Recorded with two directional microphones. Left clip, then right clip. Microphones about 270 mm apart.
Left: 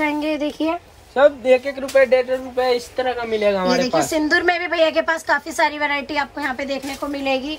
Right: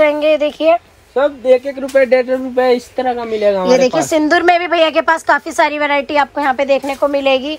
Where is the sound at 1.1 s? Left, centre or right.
Right.